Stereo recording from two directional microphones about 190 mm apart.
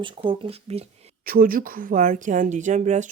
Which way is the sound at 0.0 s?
30° right (ahead or behind).